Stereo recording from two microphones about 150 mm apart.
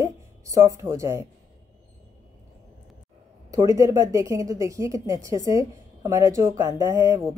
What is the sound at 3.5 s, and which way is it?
A woman's voice, 20° right (ahead or behind).